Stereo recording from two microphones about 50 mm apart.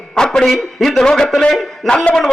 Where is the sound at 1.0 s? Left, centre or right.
Centre.